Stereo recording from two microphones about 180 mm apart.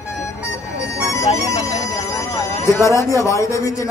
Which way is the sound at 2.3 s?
15° left (ahead or behind).